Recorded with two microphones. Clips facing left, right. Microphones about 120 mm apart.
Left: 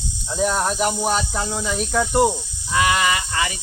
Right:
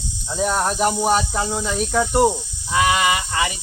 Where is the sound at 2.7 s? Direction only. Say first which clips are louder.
Right 1 dB; 15° right (ahead or behind).